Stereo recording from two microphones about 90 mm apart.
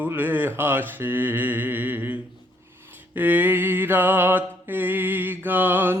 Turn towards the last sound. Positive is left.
turn(degrees=-20)  # may be behind; listen again after turning